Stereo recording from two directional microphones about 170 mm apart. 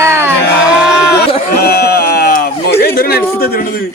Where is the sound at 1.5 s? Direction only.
65° left (ahead or behind).